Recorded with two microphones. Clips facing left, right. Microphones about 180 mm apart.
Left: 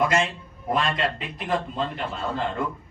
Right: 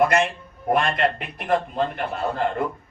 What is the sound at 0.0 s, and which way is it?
A man's voice, 55° right (ahead or behind).